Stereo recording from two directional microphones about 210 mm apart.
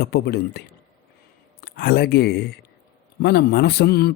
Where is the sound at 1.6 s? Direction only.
45° left (ahead or behind).